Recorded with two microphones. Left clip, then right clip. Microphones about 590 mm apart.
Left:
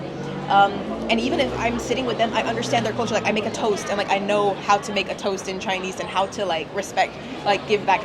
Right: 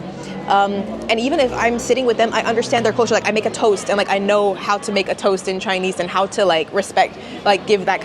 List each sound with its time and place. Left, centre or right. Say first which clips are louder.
0.4 s a woman's voice: right 1 dB; right